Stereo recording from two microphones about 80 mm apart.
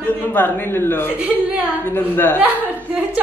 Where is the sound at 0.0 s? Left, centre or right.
Left.